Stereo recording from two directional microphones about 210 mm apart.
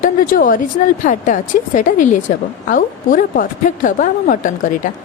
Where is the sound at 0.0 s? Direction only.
40° left (ahead or behind).